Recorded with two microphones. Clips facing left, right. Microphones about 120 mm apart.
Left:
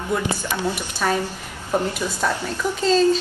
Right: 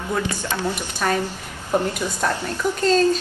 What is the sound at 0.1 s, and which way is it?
A woman's voice, 10° left (ahead or behind).